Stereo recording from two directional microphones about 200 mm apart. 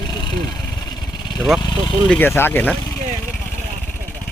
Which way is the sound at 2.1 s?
10° left (ahead or behind).